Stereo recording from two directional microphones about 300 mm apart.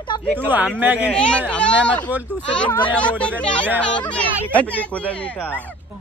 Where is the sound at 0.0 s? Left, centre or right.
Centre.